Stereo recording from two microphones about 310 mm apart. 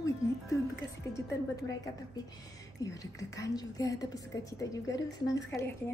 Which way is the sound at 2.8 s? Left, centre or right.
Centre.